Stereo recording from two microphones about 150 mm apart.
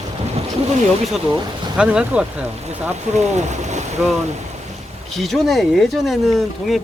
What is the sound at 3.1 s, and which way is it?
Speech, 50° right (ahead or behind).